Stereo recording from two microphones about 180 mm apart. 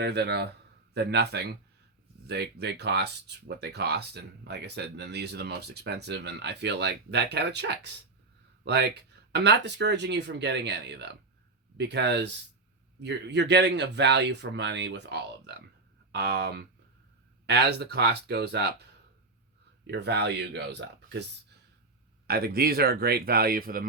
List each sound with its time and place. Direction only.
0.0 s speech: 65° right (ahead or behind)
19.9 s speech: 70° right (ahead or behind)
22.3 s speech: 60° right (ahead or behind)